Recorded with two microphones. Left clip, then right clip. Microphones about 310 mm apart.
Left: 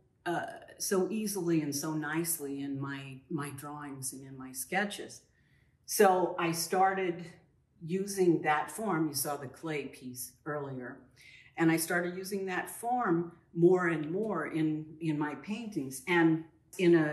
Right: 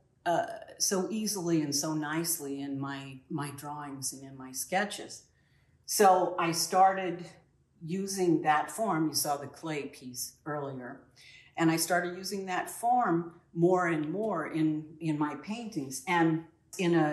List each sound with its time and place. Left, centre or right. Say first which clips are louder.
0.2 s speech: right 6 dB; centre